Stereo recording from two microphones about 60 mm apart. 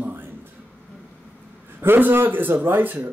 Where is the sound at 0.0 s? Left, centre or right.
Right.